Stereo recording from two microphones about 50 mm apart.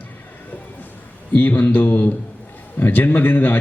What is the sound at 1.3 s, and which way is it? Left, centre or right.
A man's voice, left.